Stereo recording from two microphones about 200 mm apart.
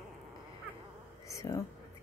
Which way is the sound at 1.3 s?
15° left (ahead or behind).